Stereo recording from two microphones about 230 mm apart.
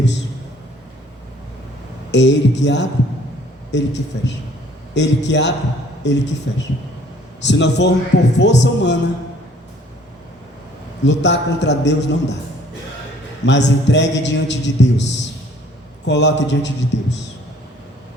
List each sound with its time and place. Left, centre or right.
2.0 s a man's voice: left
11.0 s a man's voice: left
13.4 s a man's voice: left
16.0 s a man's voice: left